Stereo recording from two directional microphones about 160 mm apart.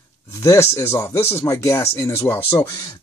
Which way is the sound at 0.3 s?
20° left (ahead or behind).